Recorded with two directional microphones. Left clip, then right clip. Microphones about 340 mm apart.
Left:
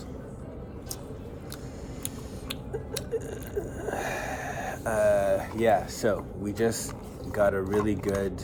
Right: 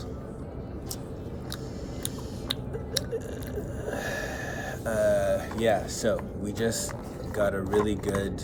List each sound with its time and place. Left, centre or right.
3.1 s wheeze: centre
7.3 s speech: centre